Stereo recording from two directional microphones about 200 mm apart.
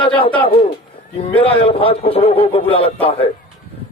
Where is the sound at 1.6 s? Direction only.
25° left (ahead or behind).